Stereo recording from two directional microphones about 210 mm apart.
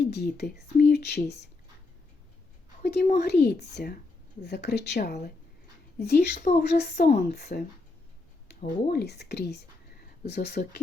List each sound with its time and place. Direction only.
0.0 s speech: 50° left (ahead or behind)
2.8 s speech: 50° left (ahead or behind)